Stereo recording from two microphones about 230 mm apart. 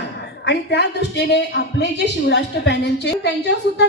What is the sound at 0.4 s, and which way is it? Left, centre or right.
A woman's voice, left.